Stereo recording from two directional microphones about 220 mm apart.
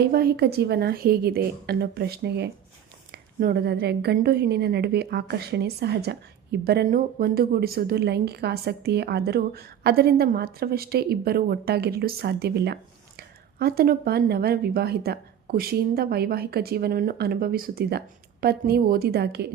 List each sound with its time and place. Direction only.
0.0 s a woman's voice: 45° right (ahead or behind)